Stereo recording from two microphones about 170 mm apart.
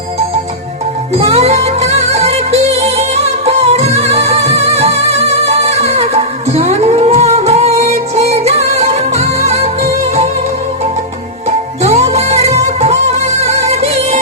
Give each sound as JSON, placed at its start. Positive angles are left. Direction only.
{"t": 1.2, "sound": "music", "side_deg": -40}
{"t": 11.8, "sound": "music", "side_deg": -40}